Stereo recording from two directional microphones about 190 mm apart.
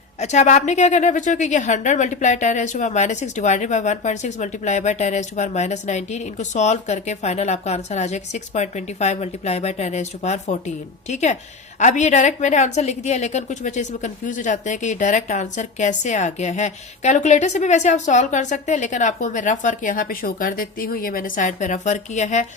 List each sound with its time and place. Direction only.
0.2 s a woman's voice: 40° left (ahead or behind)